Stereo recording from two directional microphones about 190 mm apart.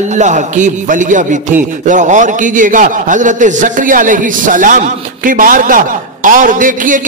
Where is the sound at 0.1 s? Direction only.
40° right (ahead or behind).